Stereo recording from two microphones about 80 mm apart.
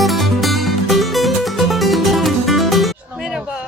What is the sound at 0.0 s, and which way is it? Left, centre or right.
Music, centre.